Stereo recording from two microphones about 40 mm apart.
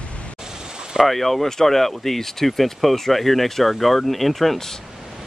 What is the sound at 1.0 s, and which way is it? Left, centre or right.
Speech, centre.